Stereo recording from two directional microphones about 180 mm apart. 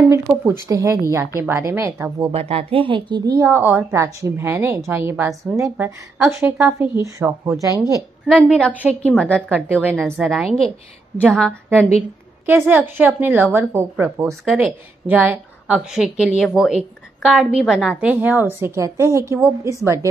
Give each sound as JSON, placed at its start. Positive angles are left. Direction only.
{"t": 0.1, "sound": "a woman's voice", "side_deg": -15}
{"t": 2.3, "sound": "a woman's voice", "side_deg": -35}
{"t": 8.5, "sound": "a woman's voice", "side_deg": 5}
{"t": 12.4, "sound": "a woman's voice", "side_deg": -10}